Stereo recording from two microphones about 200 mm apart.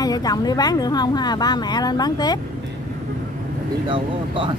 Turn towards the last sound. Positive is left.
turn(degrees=-25)  # may be behind; listen again after turning